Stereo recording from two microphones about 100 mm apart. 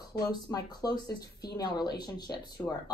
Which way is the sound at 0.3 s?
40° left (ahead or behind).